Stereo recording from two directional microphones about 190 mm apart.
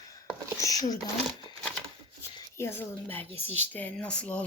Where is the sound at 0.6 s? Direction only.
20° left (ahead or behind).